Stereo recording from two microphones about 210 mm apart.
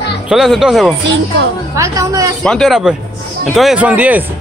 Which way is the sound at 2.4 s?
Centre (ahead or behind).